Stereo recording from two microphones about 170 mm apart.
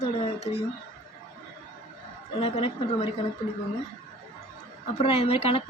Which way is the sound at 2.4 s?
35° left (ahead or behind).